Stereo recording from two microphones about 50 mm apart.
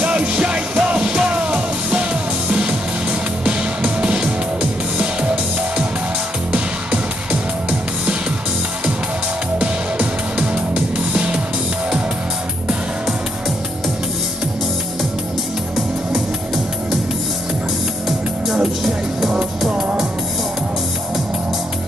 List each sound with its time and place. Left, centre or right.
0.0 s music: right
9.6 s music: right